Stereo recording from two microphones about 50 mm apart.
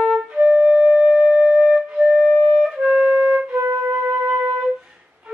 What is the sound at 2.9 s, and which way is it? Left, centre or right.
Music, centre.